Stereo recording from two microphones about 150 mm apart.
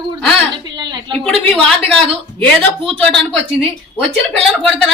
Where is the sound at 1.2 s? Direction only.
5° left (ahead or behind).